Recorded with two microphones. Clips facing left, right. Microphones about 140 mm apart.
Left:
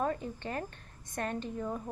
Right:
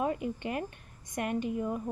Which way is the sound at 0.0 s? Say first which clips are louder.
Right 2 dB; 15° right (ahead or behind).